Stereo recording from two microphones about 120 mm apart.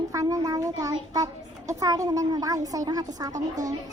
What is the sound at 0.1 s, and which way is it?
A child's voice, 30° right (ahead or behind).